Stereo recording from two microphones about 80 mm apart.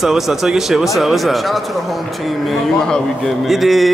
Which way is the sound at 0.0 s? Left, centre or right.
Centre.